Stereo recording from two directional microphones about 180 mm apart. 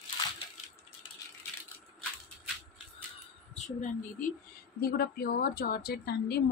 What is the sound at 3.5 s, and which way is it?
Speech, 40° left (ahead or behind).